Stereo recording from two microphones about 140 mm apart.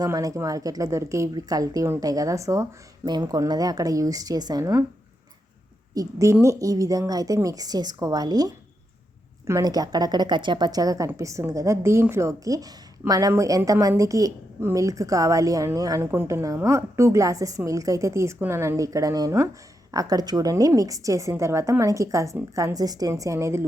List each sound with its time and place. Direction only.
0.0 s a woman's voice: 25° right (ahead or behind)
5.9 s a woman's voice: 25° right (ahead or behind)